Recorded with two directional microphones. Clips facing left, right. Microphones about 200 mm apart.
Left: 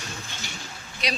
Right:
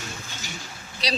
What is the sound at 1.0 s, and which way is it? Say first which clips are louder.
Speech: right 2 dB; 35° right (ahead or behind).